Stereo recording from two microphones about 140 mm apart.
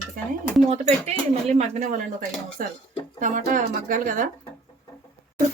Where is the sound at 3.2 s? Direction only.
70° right (ahead or behind).